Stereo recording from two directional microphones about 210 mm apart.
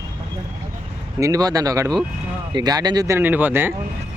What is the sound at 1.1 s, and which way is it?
Speech, 15° right (ahead or behind).